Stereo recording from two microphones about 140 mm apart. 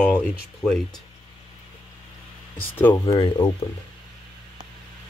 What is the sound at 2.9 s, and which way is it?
Speech, 30° left (ahead or behind).